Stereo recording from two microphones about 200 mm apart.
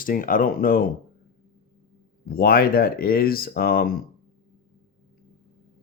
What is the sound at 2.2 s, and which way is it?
Speech, 50° left (ahead or behind).